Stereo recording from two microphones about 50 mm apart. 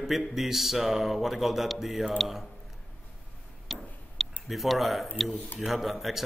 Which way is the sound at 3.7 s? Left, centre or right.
Centre.